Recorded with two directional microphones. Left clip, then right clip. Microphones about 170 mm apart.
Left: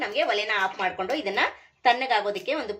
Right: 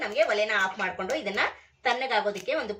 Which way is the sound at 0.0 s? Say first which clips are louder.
Even; 35° left (ahead or behind).